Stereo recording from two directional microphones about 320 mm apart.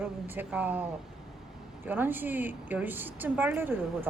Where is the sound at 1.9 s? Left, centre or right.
Centre.